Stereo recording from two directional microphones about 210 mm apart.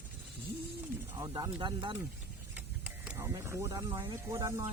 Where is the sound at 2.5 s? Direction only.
5° right (ahead or behind).